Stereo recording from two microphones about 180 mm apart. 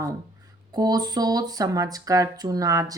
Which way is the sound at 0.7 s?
20° right (ahead or behind).